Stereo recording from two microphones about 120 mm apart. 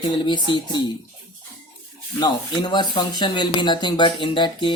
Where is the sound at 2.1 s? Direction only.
35° left (ahead or behind).